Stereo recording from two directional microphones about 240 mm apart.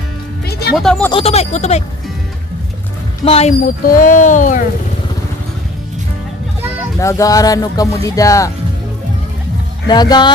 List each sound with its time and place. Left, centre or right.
0.5 s music: left
0.7 s speech: centre
1.1 s speech: left
3.3 s speech: left
7.0 s speech: centre
9.8 s speech: centre